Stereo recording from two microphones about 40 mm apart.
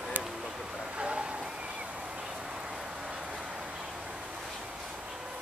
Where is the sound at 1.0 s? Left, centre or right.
Right.